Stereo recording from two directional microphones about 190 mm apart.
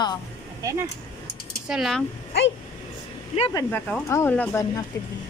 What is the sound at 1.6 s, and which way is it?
Speech, centre (ahead or behind).